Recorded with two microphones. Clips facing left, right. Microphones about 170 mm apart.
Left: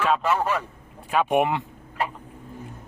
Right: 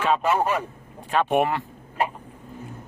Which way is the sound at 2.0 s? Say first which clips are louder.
Right 3 dB; 20° right (ahead or behind).